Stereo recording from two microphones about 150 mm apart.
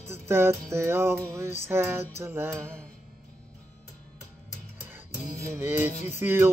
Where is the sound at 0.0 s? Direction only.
15° right (ahead or behind).